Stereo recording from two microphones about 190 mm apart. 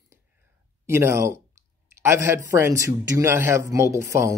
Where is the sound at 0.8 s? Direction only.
15° right (ahead or behind).